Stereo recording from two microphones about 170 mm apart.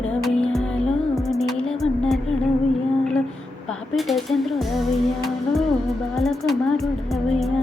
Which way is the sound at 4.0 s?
Centre (ahead or behind).